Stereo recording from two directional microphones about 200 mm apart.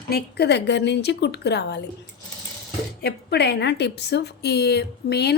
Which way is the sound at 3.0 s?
55° left (ahead or behind).